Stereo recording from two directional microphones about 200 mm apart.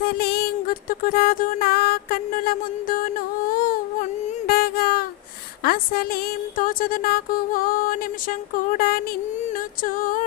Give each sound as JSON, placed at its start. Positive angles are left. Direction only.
{"t": 0.0, "sound": "music", "side_deg": 50}
{"t": 4.3, "sound": "a sound", "side_deg": 50}
{"t": 5.6, "sound": "speech", "side_deg": 50}